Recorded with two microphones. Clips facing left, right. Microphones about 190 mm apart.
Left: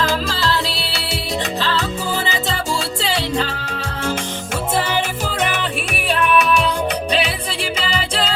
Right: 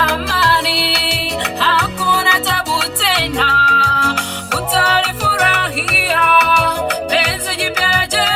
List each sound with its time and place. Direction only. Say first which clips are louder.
0.3 s music: right 3 dB; 70° right (ahead or behind)
2.7 s music: right 1 dB; 70° right (ahead or behind)